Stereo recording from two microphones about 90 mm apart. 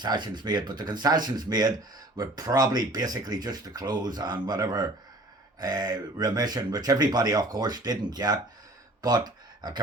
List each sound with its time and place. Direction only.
0.0 s speech: 55° right (ahead or behind)